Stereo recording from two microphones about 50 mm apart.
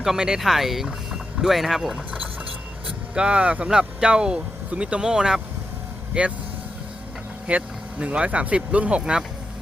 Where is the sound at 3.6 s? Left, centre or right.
Centre.